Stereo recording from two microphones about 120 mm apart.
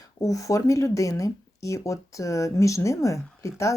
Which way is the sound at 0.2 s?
30° left (ahead or behind).